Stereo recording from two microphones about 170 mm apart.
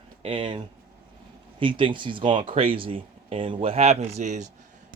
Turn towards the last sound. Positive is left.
turn(degrees=-45)  # may be behind; listen again after turning